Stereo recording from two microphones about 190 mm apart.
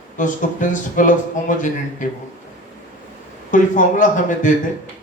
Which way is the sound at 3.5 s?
40° left (ahead or behind).